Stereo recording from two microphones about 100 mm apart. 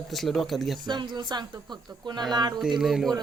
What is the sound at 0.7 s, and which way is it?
Speech, 50° right (ahead or behind).